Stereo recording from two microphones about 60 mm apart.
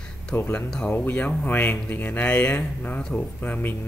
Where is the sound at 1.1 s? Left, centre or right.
Left.